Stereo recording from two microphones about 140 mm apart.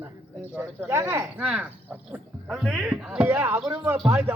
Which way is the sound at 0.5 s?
15° right (ahead or behind).